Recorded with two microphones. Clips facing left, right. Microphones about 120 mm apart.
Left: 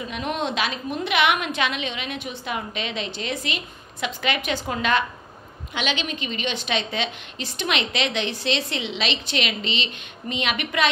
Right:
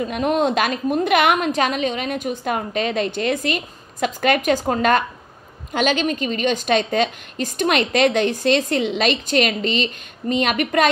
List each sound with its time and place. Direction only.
0.0 s a woman's voice: 45° right (ahead or behind)